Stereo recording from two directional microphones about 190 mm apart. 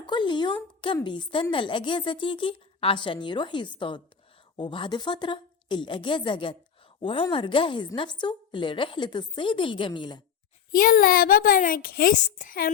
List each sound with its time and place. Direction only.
0.0 s a woman's voice: 25° left (ahead or behind)
10.7 s speech: 50° left (ahead or behind)